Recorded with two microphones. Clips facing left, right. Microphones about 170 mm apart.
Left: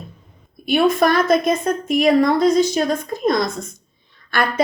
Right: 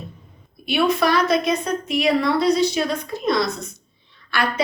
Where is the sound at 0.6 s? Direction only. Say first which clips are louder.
Left 3 dB; 45° left (ahead or behind).